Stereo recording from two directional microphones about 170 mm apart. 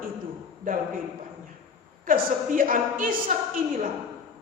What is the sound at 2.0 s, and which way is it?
A woman's voice, 55° right (ahead or behind).